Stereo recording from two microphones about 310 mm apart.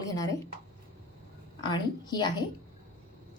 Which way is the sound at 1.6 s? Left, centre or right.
Centre.